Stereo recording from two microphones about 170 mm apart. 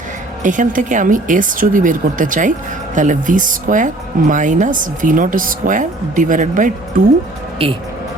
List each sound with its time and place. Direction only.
0.4 s speech: 50° right (ahead or behind)